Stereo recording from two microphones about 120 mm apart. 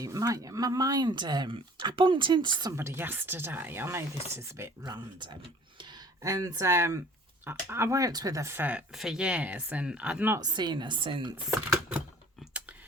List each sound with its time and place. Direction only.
0.0 s speech: 30° right (ahead or behind)
2.7 s speech: 20° right (ahead or behind)
4.9 s speech: 40° right (ahead or behind)
6.2 s speech: 30° right (ahead or behind)
8.9 s speech: centre (ahead or behind)
10.4 s speech: 35° right (ahead or behind)
11.7 s typewriter: 10° right (ahead or behind)